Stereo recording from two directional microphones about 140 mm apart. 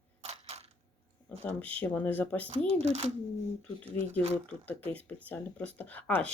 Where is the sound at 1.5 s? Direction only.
10° left (ahead or behind).